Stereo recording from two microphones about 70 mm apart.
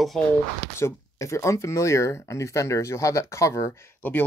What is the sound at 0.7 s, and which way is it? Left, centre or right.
Speech, left.